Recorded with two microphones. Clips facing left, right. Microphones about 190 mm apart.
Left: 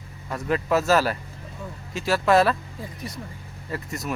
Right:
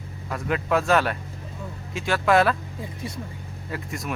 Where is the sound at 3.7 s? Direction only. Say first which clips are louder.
Left 1 dB; centre (ahead or behind).